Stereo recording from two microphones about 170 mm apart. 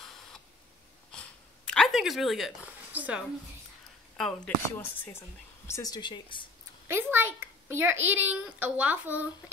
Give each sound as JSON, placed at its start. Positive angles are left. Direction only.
{"t": 1.7, "sound": "speech", "side_deg": 0}
{"t": 4.2, "sound": "a woman's voice", "side_deg": 10}
{"t": 6.9, "sound": "a child's voice", "side_deg": -15}